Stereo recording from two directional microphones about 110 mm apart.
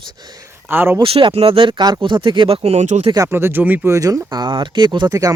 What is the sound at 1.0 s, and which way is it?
Speech, 55° right (ahead or behind).